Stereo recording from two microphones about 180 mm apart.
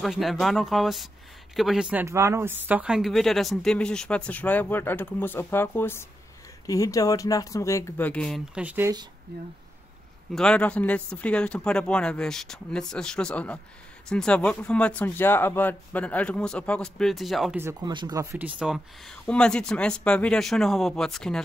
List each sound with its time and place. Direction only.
0.0 s speech: centre (ahead or behind)
8.6 s speech: 10° right (ahead or behind)
9.3 s speech: 60° right (ahead or behind)
10.3 s speech: 5° left (ahead or behind)
17.6 s speech: 20° right (ahead or behind); by 21.4 s 5° left (ahead or behind)